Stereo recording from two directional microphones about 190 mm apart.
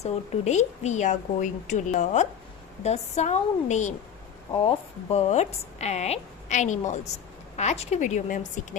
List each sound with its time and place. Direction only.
0.0 s a woman's voice: 35° left (ahead or behind)
5.1 s a woman's voice: 35° left (ahead or behind)